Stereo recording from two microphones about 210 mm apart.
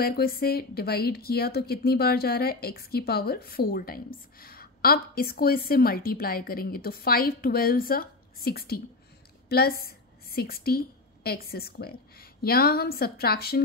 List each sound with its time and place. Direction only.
0.0 s a woman's voice: 45° left (ahead or behind)